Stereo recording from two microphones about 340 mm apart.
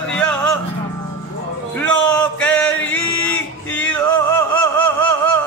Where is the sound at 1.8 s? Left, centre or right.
Centre.